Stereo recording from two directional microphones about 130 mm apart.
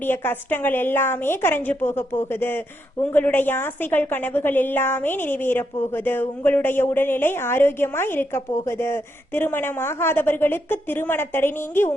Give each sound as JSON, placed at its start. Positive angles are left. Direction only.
{"t": 0.0, "sound": "a woman's voice", "side_deg": 15}